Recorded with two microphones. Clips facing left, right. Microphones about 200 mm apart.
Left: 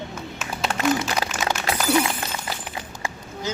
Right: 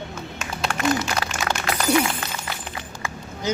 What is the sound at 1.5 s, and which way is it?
Shatter, 5° left (ahead or behind).